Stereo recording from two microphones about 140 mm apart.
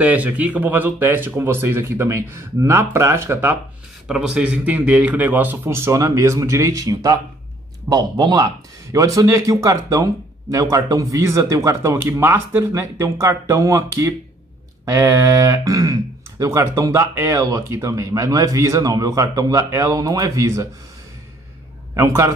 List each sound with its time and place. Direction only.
0.0 s speech: 10° right (ahead or behind)
4.1 s speech: 5° right (ahead or behind); by 20.6 s 20° right (ahead or behind)
21.9 s speech: 20° right (ahead or behind)